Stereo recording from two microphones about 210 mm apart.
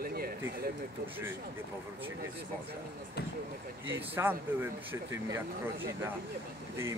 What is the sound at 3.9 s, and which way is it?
Speech, 10° right (ahead or behind).